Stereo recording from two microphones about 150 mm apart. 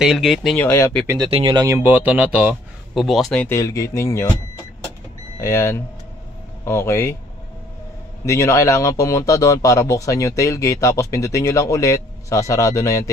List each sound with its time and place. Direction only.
0.0 s speech: centre (ahead or behind)
0.6 s speech: 15° left (ahead or behind)
1.2 s speech: 35° right (ahead or behind)
1.8 s speech: 10° right (ahead or behind)
3.4 s a man's voice: 20° left (ahead or behind)
5.4 s speech: 20° left (ahead or behind)
8.3 s a man's voice: 20° left (ahead or behind)